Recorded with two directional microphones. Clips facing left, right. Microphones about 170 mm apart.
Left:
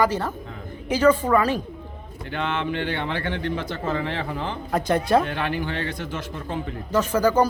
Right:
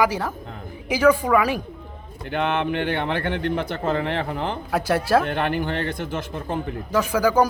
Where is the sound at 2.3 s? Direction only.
55° right (ahead or behind).